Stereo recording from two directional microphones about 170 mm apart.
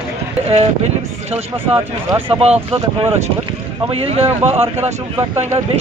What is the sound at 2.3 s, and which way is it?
Speech, 35° right (ahead or behind).